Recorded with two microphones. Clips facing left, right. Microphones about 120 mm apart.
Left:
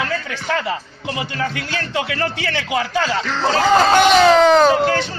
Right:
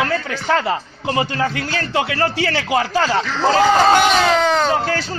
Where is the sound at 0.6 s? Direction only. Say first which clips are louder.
Right 3 dB; 40° right (ahead or behind).